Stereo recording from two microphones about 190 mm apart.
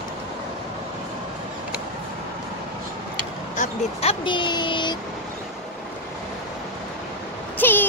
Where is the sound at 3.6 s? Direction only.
30° left (ahead or behind).